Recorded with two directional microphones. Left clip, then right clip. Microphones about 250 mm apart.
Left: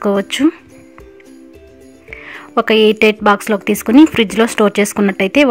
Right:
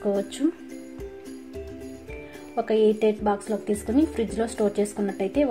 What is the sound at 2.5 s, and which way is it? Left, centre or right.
Speech, left.